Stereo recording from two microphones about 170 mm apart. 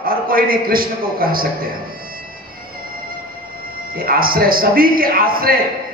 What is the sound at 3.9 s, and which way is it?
A man's voice, 60° right (ahead or behind).